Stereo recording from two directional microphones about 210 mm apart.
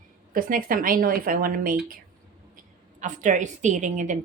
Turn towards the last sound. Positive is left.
turn(degrees=-35)  # may be behind; listen again after turning